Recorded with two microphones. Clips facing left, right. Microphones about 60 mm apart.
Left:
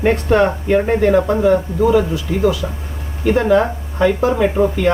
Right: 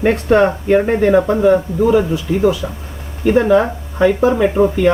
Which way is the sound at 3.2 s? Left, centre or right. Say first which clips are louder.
Right 2 dB; centre.